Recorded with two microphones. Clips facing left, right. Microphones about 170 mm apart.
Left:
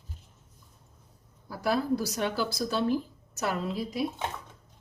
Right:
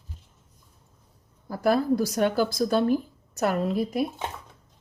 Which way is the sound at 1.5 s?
50° right (ahead or behind).